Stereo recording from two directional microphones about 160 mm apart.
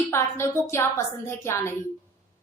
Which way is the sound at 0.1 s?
15° left (ahead or behind).